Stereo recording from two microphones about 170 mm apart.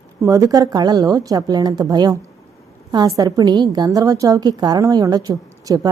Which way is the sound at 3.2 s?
20° right (ahead or behind).